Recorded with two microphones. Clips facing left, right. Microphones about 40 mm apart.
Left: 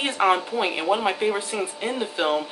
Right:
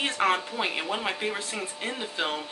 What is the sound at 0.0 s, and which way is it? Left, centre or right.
Speech, centre.